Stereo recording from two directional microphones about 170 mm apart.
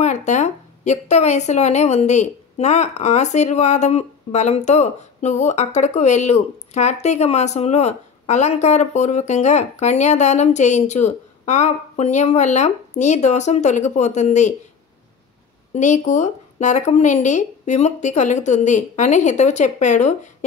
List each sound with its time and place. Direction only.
0.0 s a woman's voice: 45° left (ahead or behind)
15.7 s a woman's voice: 45° left (ahead or behind)